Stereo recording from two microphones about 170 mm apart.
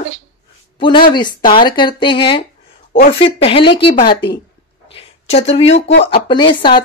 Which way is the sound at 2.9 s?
60° left (ahead or behind).